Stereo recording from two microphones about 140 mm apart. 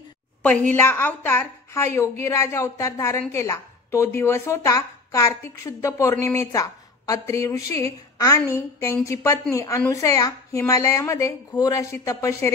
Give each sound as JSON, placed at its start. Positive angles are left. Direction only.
{"t": 0.4, "sound": "a woman's voice", "side_deg": 10}